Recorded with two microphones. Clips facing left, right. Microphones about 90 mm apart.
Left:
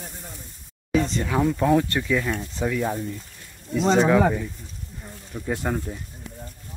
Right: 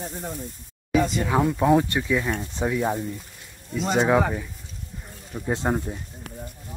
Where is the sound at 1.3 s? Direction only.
25° right (ahead or behind).